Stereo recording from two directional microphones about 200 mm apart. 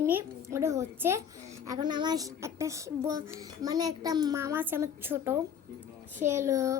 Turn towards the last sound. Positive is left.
turn(degrees=-15)  # may be behind; listen again after turning